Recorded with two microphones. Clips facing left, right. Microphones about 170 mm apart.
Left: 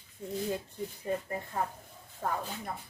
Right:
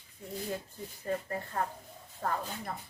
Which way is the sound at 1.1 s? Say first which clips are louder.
Right 1 dB; 10° left (ahead or behind).